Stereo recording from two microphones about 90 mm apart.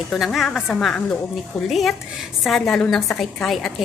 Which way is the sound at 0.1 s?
Centre (ahead or behind).